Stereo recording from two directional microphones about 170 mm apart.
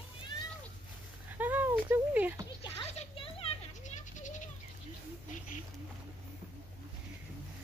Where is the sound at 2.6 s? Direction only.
30° left (ahead or behind); by 4.4 s 45° left (ahead or behind).